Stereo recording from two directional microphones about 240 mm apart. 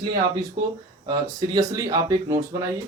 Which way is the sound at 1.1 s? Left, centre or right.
Centre.